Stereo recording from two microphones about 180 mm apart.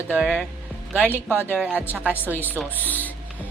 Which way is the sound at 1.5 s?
5° right (ahead or behind).